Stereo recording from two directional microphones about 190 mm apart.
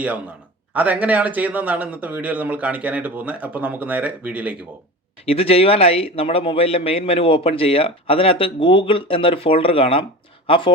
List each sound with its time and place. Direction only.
0.7 s speech: 10° right (ahead or behind)
5.2 s a man's voice: 30° left (ahead or behind)